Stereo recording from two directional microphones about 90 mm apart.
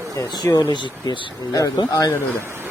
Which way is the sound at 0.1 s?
45° left (ahead or behind).